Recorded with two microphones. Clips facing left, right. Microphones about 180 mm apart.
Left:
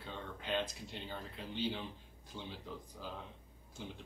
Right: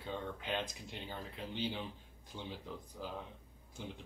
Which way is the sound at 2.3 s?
15° right (ahead or behind).